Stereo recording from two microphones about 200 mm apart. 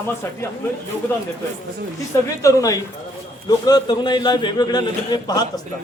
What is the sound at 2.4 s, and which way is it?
A man's voice, 15° left (ahead or behind).